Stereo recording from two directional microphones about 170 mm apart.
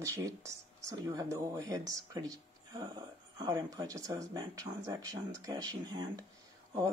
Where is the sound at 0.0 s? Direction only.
20° right (ahead or behind).